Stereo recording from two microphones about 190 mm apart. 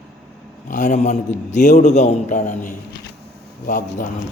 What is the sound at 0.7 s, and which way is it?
A man's voice, 40° left (ahead or behind).